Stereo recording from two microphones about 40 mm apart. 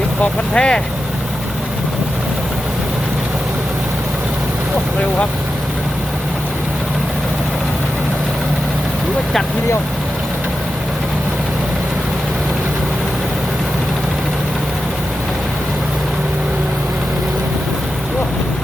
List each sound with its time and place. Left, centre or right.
0.5 s speech: left